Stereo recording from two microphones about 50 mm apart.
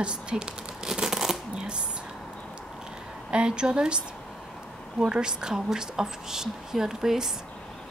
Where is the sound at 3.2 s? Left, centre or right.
Centre.